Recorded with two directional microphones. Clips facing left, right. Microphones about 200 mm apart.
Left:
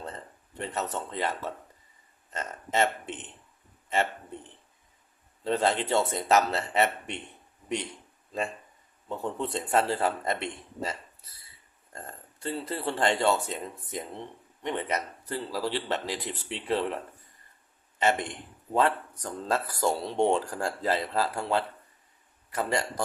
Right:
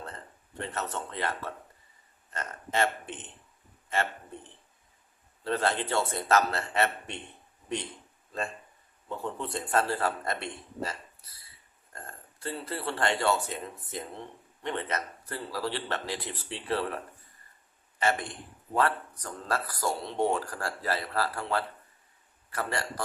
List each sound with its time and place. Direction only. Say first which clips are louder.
0.5 s speech: left 2 dB; 15° left (ahead or behind)
5.4 s speech: left 3 dB; 20° left (ahead or behind)
9.0 s speech: left 3 dB; 20° left (ahead or behind)
11.9 s speech: left 3 dB; 20° left (ahead or behind)
18.0 s speech: left 2 dB; 20° left (ahead or behind)